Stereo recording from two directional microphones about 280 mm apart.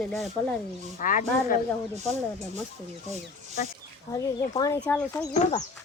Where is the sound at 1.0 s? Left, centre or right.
Left.